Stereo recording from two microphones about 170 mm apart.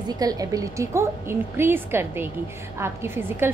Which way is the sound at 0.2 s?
20° right (ahead or behind).